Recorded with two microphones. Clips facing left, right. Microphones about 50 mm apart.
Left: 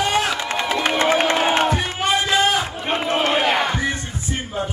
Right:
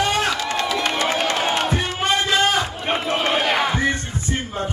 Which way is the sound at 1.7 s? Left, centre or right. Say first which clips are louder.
Even; centre.